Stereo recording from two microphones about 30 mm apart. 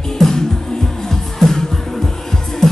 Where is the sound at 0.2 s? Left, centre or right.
Centre.